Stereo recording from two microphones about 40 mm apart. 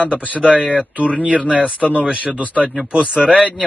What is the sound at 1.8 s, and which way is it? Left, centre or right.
Speech, centre.